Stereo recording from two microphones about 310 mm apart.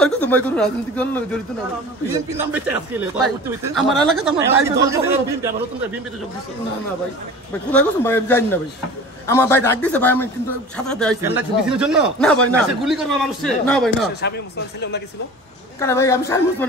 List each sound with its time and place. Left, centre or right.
0.0 s speech: centre
2.1 s speech: centre
7.7 s a man's voice: centre
14.2 s speech: left
15.8 s a man's voice: centre